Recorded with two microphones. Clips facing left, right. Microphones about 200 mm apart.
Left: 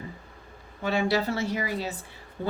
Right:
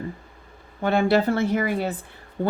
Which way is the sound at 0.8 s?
55° right (ahead or behind).